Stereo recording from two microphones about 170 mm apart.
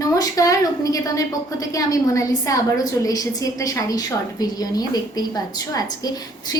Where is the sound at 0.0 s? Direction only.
20° left (ahead or behind).